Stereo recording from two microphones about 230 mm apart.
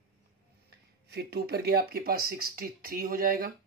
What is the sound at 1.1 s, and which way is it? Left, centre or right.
Speech, right.